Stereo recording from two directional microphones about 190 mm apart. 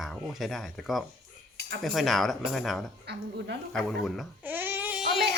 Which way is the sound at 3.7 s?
Centre (ahead or behind).